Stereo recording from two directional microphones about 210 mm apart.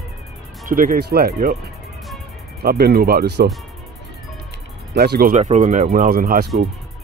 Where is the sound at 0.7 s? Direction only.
40° right (ahead or behind).